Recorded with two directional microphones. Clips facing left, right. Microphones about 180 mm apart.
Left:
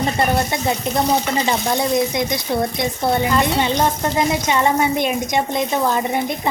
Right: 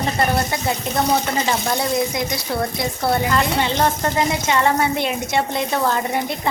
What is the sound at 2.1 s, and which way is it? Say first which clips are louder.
A woman's voice: left 3 dB; 20° left (ahead or behind).